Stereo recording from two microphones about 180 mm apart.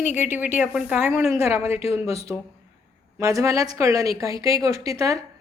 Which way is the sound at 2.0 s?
35° left (ahead or behind).